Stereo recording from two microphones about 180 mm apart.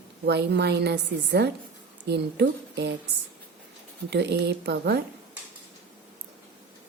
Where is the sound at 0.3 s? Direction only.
65° right (ahead or behind).